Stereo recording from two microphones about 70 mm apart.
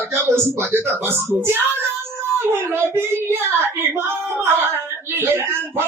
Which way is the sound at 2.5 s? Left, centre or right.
Right.